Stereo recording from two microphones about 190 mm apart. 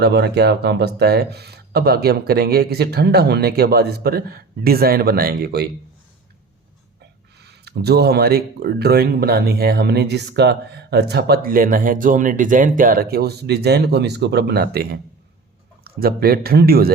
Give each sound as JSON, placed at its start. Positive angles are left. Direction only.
{"t": 0.0, "sound": "speech", "side_deg": -60}
{"t": 7.3, "sound": "speech", "side_deg": -60}